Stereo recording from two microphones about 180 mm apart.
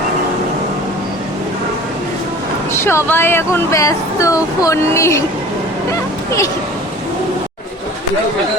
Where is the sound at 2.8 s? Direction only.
15° left (ahead or behind).